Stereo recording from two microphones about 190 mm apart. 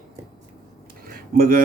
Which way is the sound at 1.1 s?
50° right (ahead or behind).